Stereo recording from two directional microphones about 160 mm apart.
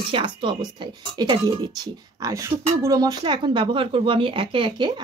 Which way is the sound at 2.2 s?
20° right (ahead or behind).